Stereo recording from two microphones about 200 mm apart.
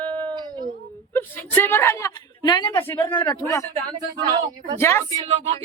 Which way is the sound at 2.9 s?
10° left (ahead or behind).